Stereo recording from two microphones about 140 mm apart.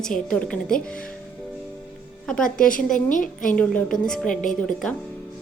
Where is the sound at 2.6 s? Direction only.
75° left (ahead or behind).